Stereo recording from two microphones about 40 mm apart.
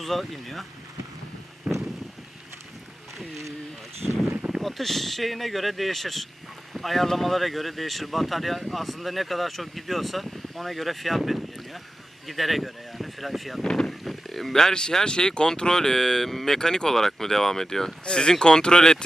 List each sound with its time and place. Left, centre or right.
0.0 s speech: centre
1.7 s vehicle: right
4.6 s speech: centre
13.7 s speech: centre
14.0 s speech: centre
16.6 s speech: centre
18.0 s speech: left